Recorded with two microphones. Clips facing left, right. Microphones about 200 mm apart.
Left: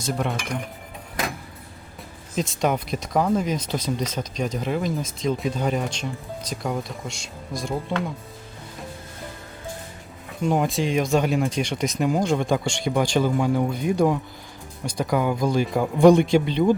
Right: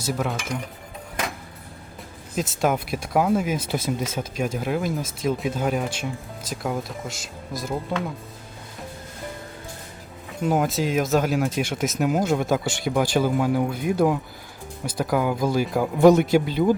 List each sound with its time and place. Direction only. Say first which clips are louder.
0.0 s speech: even; 5° right (ahead or behind)
2.3 s speech: even; 5° right (ahead or behind)
10.4 s speech: even; 5° right (ahead or behind)